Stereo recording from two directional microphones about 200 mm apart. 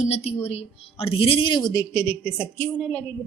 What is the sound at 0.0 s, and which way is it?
A woman's voice, 30° left (ahead or behind).